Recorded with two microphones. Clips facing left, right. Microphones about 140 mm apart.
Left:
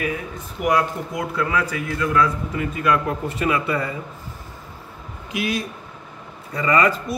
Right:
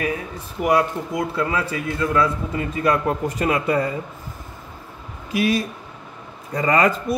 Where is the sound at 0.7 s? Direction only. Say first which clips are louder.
Right 1 dB; 25° right (ahead or behind).